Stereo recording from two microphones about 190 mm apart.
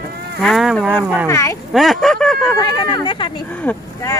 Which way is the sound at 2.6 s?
20° left (ahead or behind).